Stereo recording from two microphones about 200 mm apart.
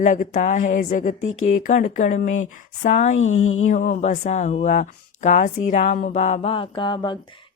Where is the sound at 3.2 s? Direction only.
90° left.